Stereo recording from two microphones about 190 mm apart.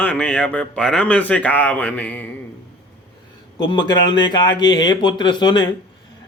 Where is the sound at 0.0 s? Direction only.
10° left (ahead or behind).